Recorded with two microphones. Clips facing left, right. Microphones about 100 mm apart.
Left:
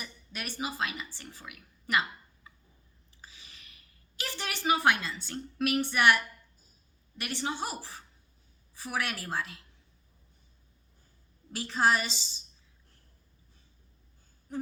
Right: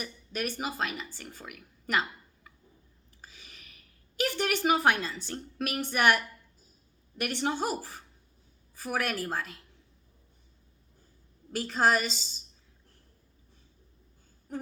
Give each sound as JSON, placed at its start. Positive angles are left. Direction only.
{"t": 0.6, "sound": "a woman's voice", "side_deg": -45}
{"t": 3.2, "sound": "a sound", "side_deg": -50}
{"t": 4.2, "sound": "a woman's voice", "side_deg": -50}
{"t": 7.2, "sound": "a woman's voice", "side_deg": -50}
{"t": 11.5, "sound": "a woman's voice", "side_deg": -45}